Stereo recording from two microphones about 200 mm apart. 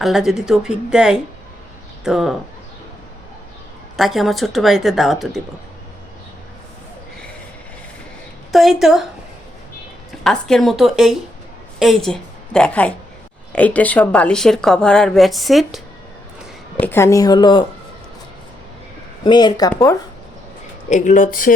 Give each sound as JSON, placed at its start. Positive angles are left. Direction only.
{"t": 0.0, "sound": "a woman's voice", "side_deg": 0}
{"t": 3.9, "sound": "a woman's voice", "side_deg": 0}
{"t": 8.5, "sound": "a woman's voice", "side_deg": 0}
{"t": 10.1, "sound": "a woman's voice", "side_deg": 0}
{"t": 16.8, "sound": "a woman's voice", "side_deg": 10}
{"t": 19.2, "sound": "a woman's voice", "side_deg": 20}
{"t": 20.9, "sound": "speech", "side_deg": 40}